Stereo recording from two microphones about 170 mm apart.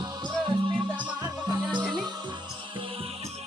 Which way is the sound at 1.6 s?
5° right (ahead or behind).